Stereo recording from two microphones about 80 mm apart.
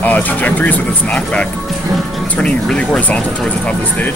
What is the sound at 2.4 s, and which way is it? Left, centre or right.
Speech, centre.